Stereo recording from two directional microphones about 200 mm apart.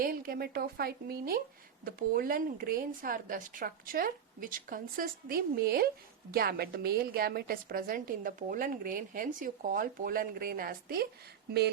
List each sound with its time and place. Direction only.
0.0 s a woman's voice: 45° right (ahead or behind)